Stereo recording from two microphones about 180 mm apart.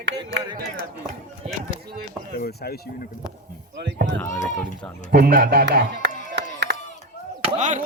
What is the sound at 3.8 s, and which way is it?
Speech, 75° right (ahead or behind).